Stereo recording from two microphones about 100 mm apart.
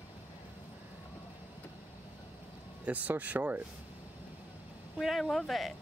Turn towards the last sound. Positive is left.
turn(degrees=0)  # may be behind; listen again after turning